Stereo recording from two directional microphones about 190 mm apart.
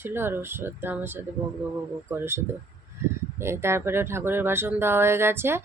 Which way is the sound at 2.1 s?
15° right (ahead or behind).